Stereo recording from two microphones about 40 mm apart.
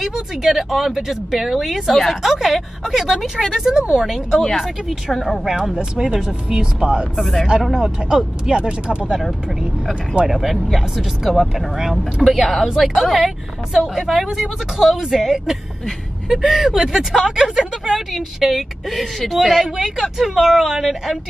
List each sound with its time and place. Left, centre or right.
0.5 s a woman's voice: centre
3.4 s speech: centre
4.4 s a woman's voice: centre
5.9 s speech: centre
7.2 s a woman's voice: centre
8.5 s speech: right
10.2 s a woman's voice: centre